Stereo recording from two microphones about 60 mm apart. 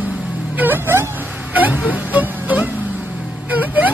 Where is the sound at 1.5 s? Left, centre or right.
Right.